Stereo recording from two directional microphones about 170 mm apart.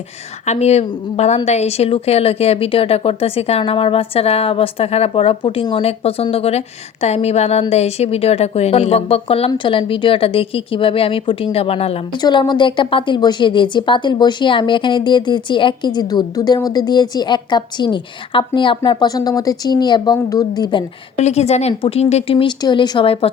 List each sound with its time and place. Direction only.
0.4 s a woman's voice: 40° left (ahead or behind)
21.2 s speech: 40° left (ahead or behind)